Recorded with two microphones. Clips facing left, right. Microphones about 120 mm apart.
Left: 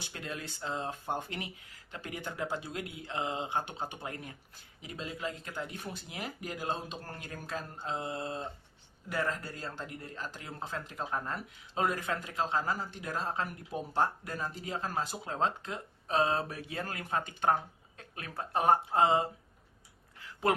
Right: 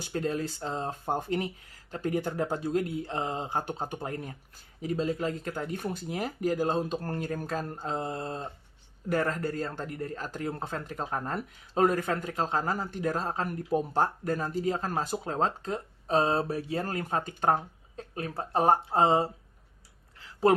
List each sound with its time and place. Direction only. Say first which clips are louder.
0.0 s speech: right 11 dB; 40° right (ahead or behind)